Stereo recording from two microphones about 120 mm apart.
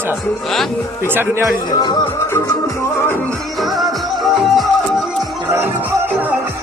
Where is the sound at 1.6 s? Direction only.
35° left (ahead or behind).